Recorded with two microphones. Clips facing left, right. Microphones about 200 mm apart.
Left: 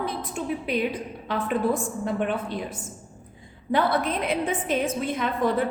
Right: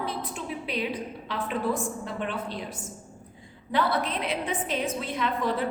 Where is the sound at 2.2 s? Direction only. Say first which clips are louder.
Left 5 dB; 50° left (ahead or behind).